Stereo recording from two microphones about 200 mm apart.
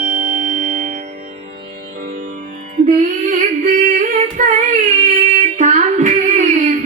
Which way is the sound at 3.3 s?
40° right (ahead or behind).